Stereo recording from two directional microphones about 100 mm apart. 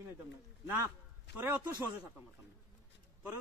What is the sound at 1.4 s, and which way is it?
Speech, 15° right (ahead or behind).